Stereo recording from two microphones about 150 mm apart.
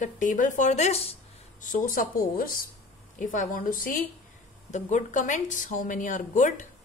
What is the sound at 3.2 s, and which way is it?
Speech, 60° left (ahead or behind).